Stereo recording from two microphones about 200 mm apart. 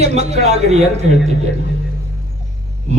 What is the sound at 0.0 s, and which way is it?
Speech, 35° right (ahead or behind).